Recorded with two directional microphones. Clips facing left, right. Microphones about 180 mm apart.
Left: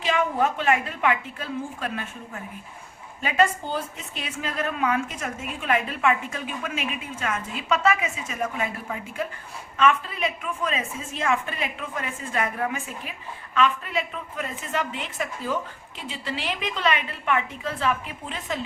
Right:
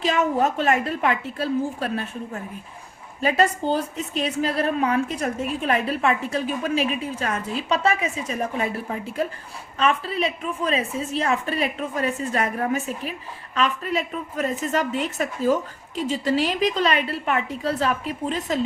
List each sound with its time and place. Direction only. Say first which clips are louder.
0.0 s a woman's voice: right 3 dB; 40° right (ahead or behind)